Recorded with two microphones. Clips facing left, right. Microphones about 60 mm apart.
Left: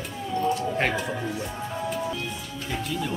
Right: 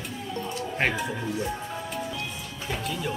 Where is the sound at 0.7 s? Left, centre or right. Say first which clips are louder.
Left 1 dB; centre.